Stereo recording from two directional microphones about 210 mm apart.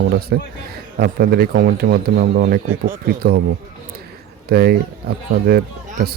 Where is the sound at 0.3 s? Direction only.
45° right (ahead or behind).